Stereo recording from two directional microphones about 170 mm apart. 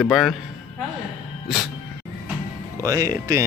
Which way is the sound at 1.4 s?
Centre (ahead or behind).